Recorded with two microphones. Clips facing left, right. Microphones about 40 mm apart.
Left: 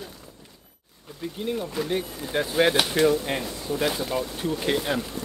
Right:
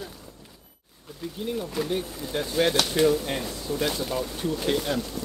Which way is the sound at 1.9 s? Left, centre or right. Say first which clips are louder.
Left 1 dB; centre.